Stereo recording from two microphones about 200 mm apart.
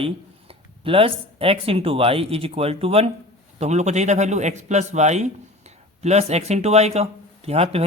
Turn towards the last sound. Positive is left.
turn(degrees=-30)  # may be behind; listen again after turning